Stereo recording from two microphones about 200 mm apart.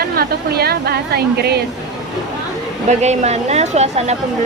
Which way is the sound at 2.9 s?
35° right (ahead or behind).